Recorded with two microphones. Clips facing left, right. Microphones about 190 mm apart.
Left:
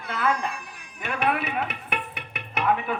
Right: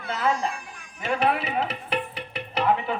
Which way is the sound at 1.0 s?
30° right (ahead or behind).